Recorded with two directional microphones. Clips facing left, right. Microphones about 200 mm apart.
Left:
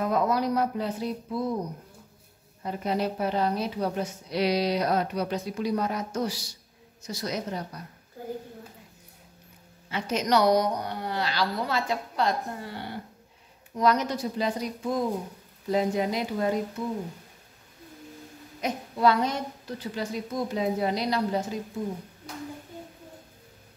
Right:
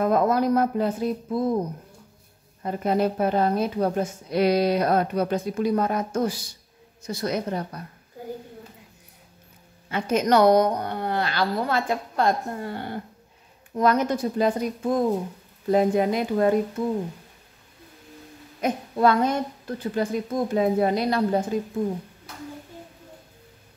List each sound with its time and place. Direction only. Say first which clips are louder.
0.0 s a woman's voice: right 5 dB; 50° right (ahead or behind)
2.6 s a woman's voice: right 5 dB; 50° right (ahead or behind)
9.8 s a woman's voice: right 5 dB; 50° right (ahead or behind)
18.6 s a woman's voice: right 4 dB; 50° right (ahead or behind)